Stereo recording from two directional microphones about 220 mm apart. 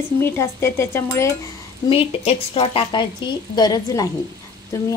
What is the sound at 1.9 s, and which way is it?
A woman's voice, 25° left (ahead or behind).